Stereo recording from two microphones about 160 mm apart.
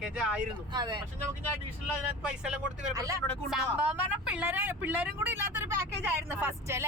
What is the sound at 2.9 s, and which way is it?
Speech, 20° right (ahead or behind).